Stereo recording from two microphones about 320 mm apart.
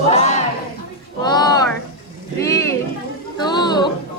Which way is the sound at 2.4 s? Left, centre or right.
Centre.